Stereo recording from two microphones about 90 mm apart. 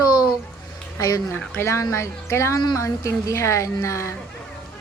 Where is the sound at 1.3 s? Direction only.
25° left (ahead or behind).